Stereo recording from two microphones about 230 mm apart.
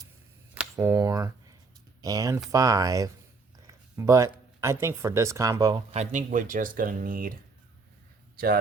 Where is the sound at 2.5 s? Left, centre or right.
Centre.